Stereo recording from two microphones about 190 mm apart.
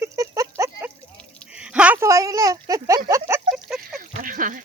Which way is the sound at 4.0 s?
45° right (ahead or behind).